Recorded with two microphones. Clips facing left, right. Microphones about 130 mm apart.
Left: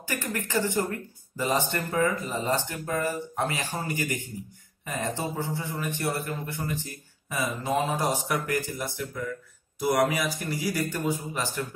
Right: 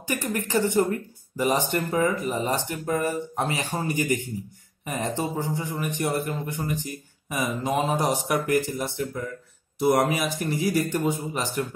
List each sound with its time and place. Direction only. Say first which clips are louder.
0.0 s a man's voice: right 4 dB; 15° right (ahead or behind)